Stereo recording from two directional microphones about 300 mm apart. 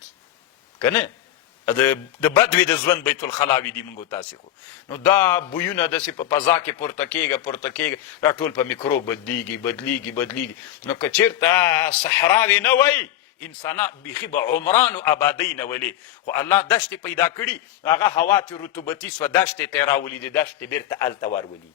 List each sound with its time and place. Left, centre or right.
0.8 s a man's voice: centre
4.9 s a man's voice: centre
14.3 s a man's voice: left
14.9 s a man's voice: centre